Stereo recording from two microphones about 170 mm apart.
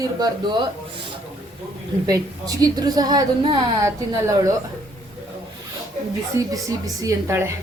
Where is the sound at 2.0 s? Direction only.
20° right (ahead or behind).